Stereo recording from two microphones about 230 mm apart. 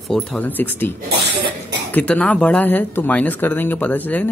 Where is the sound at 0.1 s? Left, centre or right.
Centre.